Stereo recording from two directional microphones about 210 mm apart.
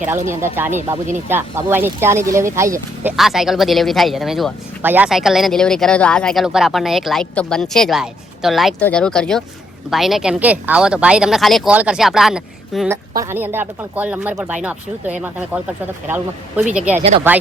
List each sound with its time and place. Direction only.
0.3 s speech: 10° right (ahead or behind)
17.0 s speech: 30° right (ahead or behind)